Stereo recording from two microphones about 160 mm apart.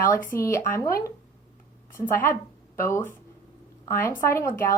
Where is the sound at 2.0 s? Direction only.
15° left (ahead or behind).